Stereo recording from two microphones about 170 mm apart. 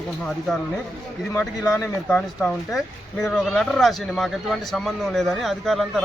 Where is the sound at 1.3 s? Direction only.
20° left (ahead or behind).